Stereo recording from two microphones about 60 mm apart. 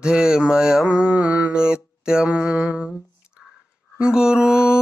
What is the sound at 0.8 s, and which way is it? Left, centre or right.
Mantra, centre.